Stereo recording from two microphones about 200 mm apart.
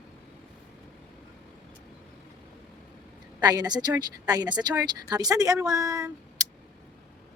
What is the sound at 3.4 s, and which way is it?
Speech, 20° right (ahead or behind).